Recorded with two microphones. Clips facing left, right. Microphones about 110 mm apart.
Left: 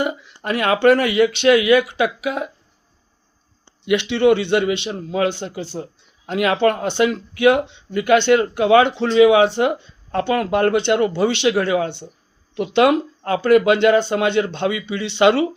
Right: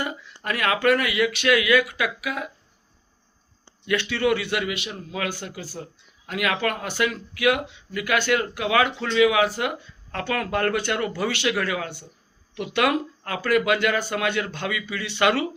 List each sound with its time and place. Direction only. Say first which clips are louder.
0.0 s speech: left 7 dB; 20° left (ahead or behind)
3.8 s speech: left 7 dB; 20° left (ahead or behind)